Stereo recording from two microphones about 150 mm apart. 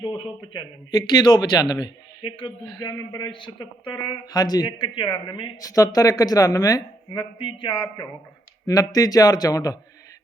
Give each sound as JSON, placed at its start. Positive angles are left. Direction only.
{"t": 0.0, "sound": "a man's voice", "side_deg": 30}